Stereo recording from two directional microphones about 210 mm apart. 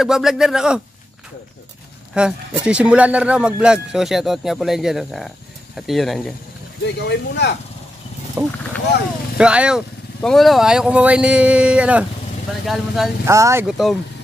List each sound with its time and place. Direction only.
0.0 s speech: centre (ahead or behind)
2.1 s speech: 5° right (ahead or behind)
6.8 s speech: 55° left (ahead or behind)
8.4 s speech: 10° right (ahead or behind)
13.2 s speech: 15° right (ahead or behind)
13.7 s speech: centre (ahead or behind)